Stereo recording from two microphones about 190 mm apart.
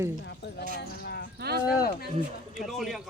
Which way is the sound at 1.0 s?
60° left (ahead or behind).